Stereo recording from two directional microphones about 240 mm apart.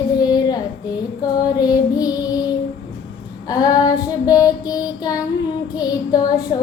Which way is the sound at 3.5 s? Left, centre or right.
Centre.